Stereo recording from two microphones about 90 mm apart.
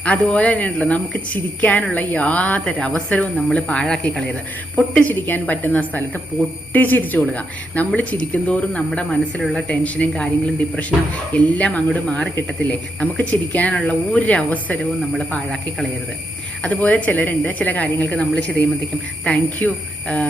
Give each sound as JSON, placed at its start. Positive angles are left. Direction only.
{"t": 0.0, "sound": "speech", "side_deg": 15}
{"t": 4.9, "sound": "a woman's voice", "side_deg": 20}
{"t": 16.6, "sound": "speech", "side_deg": 15}